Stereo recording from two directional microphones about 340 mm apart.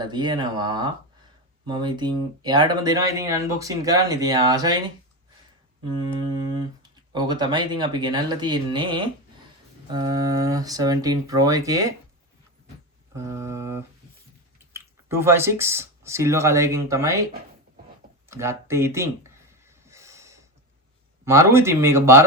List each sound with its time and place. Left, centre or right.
0.0 s speech: centre
6.3 s speech: centre
13.1 s speech: centre
18.3 s speech: centre
19.6 s snort: centre
21.2 s speech: centre